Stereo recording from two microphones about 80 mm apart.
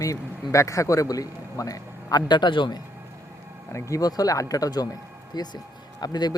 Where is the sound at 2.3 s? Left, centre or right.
Left.